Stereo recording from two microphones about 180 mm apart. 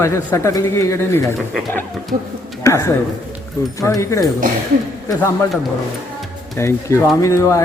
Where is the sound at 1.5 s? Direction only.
Centre (ahead or behind).